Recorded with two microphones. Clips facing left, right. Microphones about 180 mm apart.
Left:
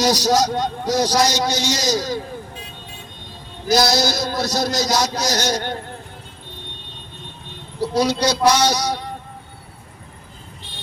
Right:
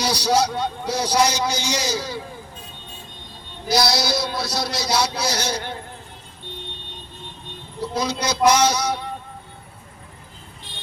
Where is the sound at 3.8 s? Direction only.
45° left (ahead or behind).